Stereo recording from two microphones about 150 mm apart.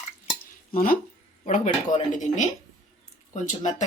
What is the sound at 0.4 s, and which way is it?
Stir, 70° left (ahead or behind).